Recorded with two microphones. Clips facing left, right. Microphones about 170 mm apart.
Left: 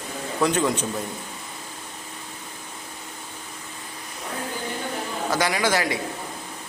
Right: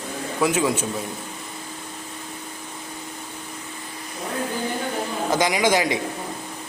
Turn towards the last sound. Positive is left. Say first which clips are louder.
# right 3 dB
turn(degrees=-20)  # may be behind; listen again after turning